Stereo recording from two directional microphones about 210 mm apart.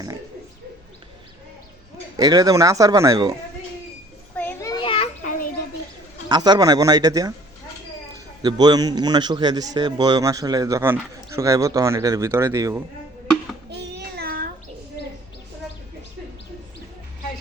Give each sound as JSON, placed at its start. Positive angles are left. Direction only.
{"t": 2.1, "sound": "a man's voice", "side_deg": -15}
{"t": 4.4, "sound": "a sound", "side_deg": 10}
{"t": 6.2, "sound": "a man's voice", "side_deg": -20}
{"t": 8.4, "sound": "a man's voice", "side_deg": -20}
{"t": 13.7, "sound": "child singing", "side_deg": -55}